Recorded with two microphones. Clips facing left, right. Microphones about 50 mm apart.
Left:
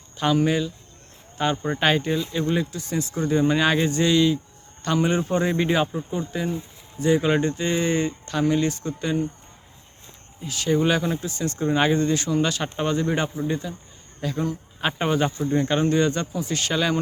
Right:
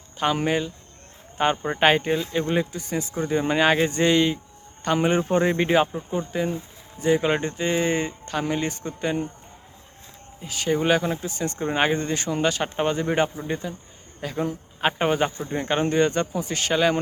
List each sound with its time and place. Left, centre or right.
0.2 s speech: centre
10.4 s speech: centre